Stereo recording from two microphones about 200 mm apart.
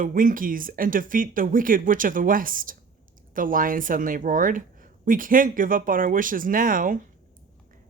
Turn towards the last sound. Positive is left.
turn(degrees=-45)  # may be behind; listen again after turning